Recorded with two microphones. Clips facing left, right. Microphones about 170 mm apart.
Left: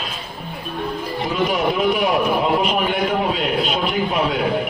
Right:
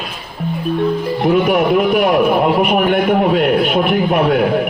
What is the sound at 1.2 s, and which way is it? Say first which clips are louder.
A man's voice: right 7 dB; 60° right (ahead or behind).